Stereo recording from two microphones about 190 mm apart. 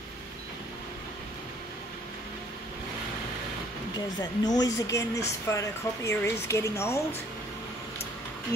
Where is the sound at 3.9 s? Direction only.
20° left (ahead or behind).